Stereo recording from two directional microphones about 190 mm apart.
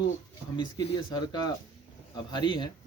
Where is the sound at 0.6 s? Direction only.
20° left (ahead or behind).